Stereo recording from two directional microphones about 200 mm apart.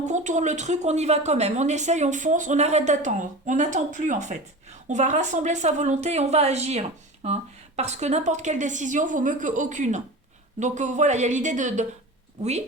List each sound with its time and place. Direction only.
0.0 s a woman's voice: 35° right (ahead or behind)